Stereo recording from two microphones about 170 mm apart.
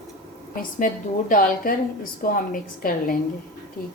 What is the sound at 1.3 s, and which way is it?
A woman's voice, 55° left (ahead or behind).